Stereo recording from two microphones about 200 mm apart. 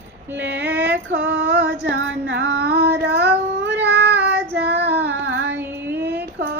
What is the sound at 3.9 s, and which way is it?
Child singing, 55° right (ahead or behind).